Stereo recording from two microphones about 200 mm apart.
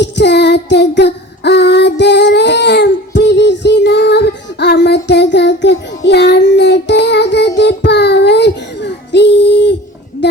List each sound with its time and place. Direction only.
0.0 s child singing: 60° left (ahead or behind)